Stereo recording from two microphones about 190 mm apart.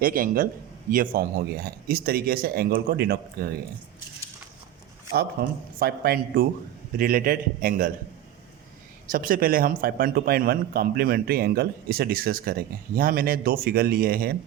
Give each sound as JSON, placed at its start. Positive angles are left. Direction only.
{"t": 0.0, "sound": "speech", "side_deg": -50}
{"t": 5.1, "sound": "speech", "side_deg": -55}
{"t": 9.1, "sound": "speech", "side_deg": -45}